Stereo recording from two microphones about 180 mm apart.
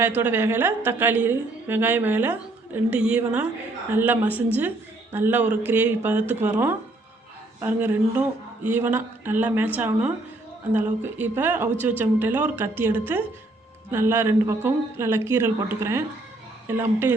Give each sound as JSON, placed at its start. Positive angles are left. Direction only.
{"t": 0.0, "sound": "a woman's voice", "side_deg": -10}